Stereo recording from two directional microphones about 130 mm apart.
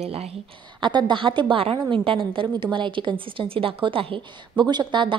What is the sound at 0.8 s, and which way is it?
A woman's voice, 35° right (ahead or behind).